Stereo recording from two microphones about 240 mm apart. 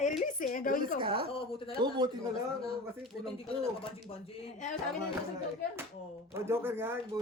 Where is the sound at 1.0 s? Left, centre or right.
Right.